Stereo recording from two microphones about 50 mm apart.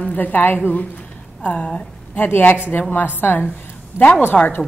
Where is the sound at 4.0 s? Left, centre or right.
Right.